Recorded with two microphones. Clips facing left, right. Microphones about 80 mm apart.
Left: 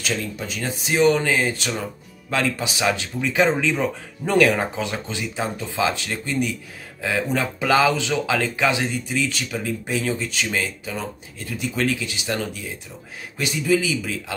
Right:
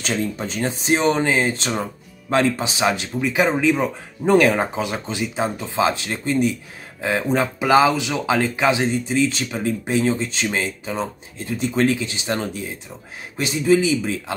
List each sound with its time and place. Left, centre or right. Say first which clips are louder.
0.0 s speech: right 3 dB; right
1.7 s speech: right 3 dB; right